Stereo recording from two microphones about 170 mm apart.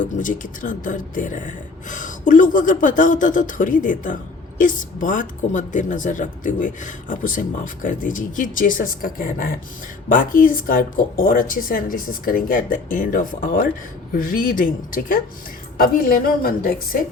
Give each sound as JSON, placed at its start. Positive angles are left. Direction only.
{"t": 0.0, "sound": "a woman's voice", "side_deg": 50}